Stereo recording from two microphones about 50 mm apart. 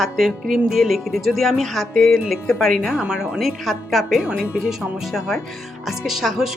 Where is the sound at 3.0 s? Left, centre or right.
Centre.